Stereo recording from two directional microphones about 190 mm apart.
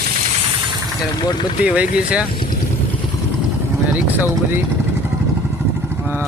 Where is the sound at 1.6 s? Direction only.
5° right (ahead or behind).